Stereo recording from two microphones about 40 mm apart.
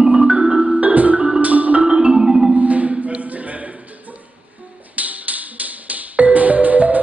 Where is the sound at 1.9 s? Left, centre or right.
Right.